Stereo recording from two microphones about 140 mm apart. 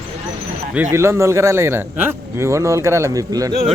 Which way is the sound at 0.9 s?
20° right (ahead or behind).